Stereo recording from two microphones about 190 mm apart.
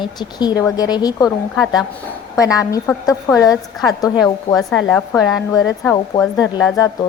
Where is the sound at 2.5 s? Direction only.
15° left (ahead or behind).